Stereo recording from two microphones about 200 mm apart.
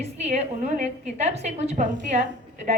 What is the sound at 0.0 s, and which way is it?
A woman's voice, 35° right (ahead or behind).